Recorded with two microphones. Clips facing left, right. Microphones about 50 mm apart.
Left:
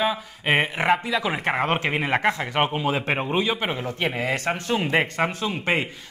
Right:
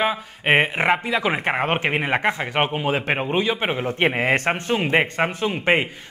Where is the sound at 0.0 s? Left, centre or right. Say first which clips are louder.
Right 2 dB; right.